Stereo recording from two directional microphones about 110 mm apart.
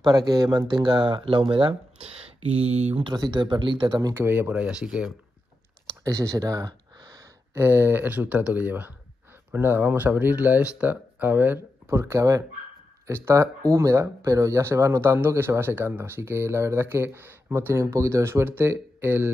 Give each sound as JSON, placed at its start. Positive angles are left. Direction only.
{"t": 0.0, "sound": "speech", "side_deg": -35}
{"t": 2.0, "sound": "speech", "side_deg": -65}
{"t": 3.0, "sound": "speech", "side_deg": -40}
{"t": 4.1, "sound": "speech", "side_deg": -20}
{"t": 6.0, "sound": "a sound", "side_deg": -30}
{"t": 7.5, "sound": "speech", "side_deg": -20}